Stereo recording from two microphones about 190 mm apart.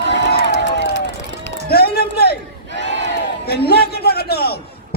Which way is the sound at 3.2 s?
55° left (ahead or behind).